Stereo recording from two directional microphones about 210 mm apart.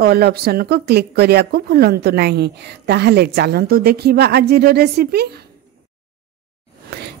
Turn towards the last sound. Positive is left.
turn(degrees=-50)  # may be behind; listen again after turning